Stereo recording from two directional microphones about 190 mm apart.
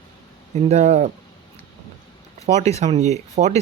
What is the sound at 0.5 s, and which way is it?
Speech, 35° right (ahead or behind).